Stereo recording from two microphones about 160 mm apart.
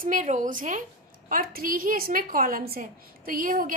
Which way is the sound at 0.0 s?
55° right (ahead or behind).